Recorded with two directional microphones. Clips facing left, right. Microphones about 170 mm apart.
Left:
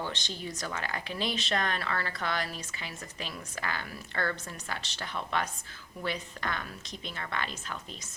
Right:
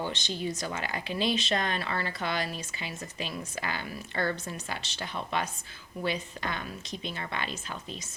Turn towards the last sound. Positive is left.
turn(degrees=-20)  # may be behind; listen again after turning